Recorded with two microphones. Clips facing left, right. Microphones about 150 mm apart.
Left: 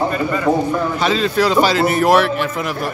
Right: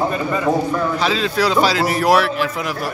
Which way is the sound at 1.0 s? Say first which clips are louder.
Left 5 dB; centre (ahead or behind).